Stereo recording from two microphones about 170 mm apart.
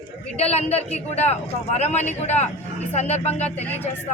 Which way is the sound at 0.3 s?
40° left (ahead or behind).